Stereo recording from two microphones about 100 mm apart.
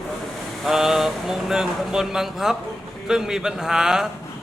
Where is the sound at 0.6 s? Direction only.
5° right (ahead or behind).